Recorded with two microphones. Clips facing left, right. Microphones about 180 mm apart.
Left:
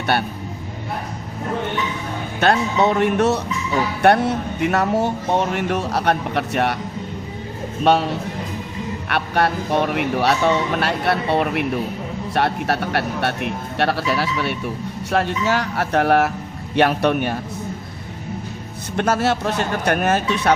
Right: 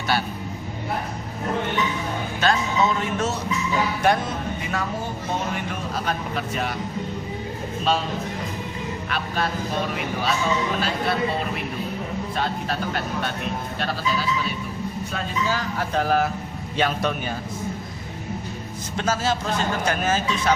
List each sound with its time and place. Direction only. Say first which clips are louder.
0.1 s speech: left 3 dB; 60° left (ahead or behind)
2.4 s speech: left 5 dB; 65° left (ahead or behind)
7.9 s speech: left 7 dB; 65° left (ahead or behind)
9.0 s speech: left 8 dB; 65° left (ahead or behind)
18.9 s speech: left 5 dB; 60° left (ahead or behind)